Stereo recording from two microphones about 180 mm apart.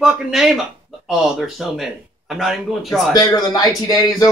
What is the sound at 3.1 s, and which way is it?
Speech, 20° left (ahead or behind).